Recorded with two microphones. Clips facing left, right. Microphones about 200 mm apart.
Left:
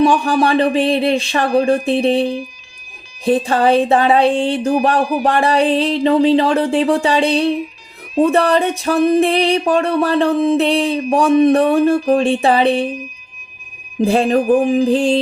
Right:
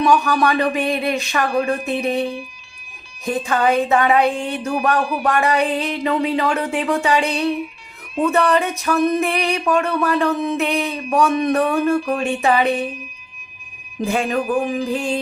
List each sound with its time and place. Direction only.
0.0 s speech: 30° left (ahead or behind)
3.2 s music: 30° left (ahead or behind)
14.0 s music: 35° left (ahead or behind)